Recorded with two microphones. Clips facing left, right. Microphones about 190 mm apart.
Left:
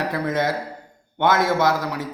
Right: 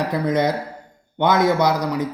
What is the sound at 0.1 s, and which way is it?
A man's voice, 15° right (ahead or behind).